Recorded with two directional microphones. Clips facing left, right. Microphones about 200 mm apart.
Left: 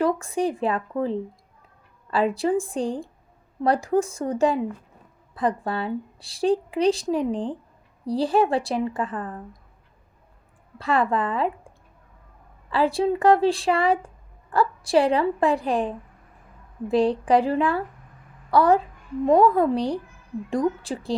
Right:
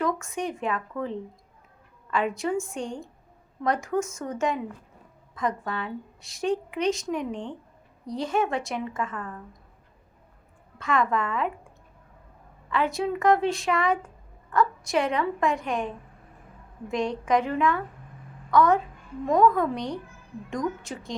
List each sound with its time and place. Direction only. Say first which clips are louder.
0.0 s speech: left 6 dB; 35° left (ahead or behind)
10.8 s speech: left 3 dB; 35° left (ahead or behind)
12.7 s speech: left 5 dB; 30° left (ahead or behind)
16.9 s speech: left 6 dB; 35° left (ahead or behind)